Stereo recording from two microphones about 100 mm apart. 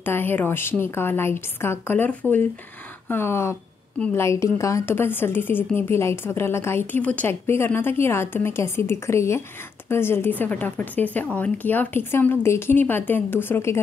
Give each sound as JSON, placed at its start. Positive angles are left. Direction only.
{"t": 0.0, "sound": "a woman's voice", "side_deg": 20}